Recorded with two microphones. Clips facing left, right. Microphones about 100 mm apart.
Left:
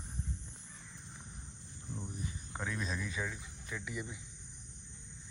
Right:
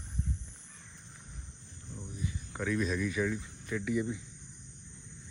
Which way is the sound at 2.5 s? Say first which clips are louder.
Right 8 dB; 25° left (ahead or behind).